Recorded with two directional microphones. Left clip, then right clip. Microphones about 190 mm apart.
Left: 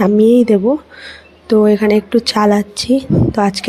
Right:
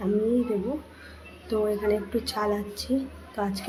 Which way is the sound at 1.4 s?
45° left (ahead or behind).